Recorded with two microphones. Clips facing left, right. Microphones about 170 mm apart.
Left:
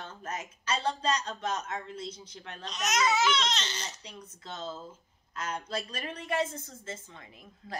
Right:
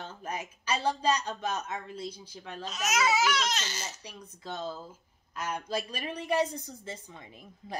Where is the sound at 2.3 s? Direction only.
5° right (ahead or behind).